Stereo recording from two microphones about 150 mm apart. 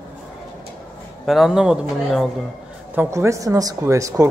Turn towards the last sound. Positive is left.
turn(degrees=-20)  # may be behind; listen again after turning